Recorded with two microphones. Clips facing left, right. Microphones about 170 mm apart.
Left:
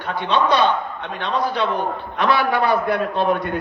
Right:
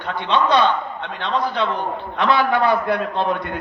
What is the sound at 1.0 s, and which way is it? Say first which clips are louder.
Speech: even; 15° left (ahead or behind).